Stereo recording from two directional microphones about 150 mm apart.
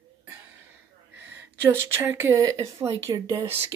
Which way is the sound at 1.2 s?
15° right (ahead or behind).